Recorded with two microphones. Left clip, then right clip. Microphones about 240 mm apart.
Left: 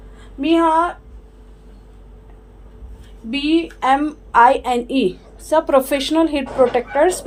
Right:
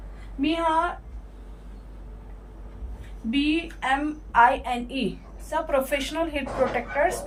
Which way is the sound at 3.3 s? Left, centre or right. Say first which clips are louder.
Left 7 dB; left.